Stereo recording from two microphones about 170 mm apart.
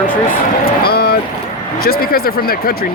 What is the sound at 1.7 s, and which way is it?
Speech, 65° left (ahead or behind).